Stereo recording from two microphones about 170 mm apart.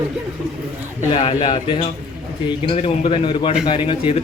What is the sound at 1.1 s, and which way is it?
A man's voice, 30° left (ahead or behind).